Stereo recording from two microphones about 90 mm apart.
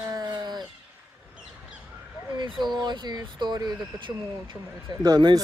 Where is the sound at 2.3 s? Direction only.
55° right (ahead or behind).